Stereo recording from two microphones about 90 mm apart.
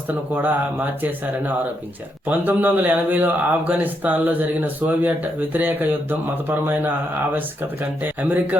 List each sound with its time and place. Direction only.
0.1 s speech: 20° right (ahead or behind)